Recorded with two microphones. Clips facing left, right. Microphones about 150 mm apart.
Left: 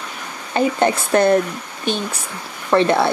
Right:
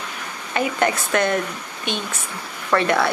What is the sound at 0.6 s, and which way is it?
Speech, 30° left (ahead or behind).